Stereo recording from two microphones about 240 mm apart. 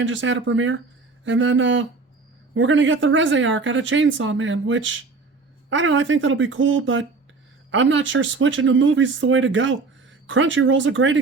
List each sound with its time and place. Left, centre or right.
0.0 s speech: right